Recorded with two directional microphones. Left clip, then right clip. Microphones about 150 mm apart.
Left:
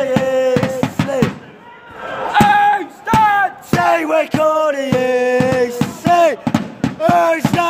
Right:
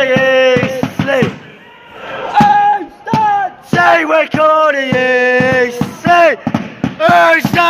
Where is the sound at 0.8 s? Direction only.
Centre (ahead or behind).